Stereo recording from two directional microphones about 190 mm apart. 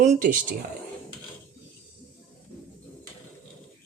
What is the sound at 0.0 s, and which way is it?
Speech, 40° right (ahead or behind).